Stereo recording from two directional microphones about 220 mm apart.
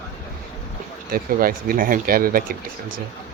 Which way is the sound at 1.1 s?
40° right (ahead or behind).